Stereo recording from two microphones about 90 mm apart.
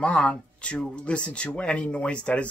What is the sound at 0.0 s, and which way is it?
Speech, 15° left (ahead or behind).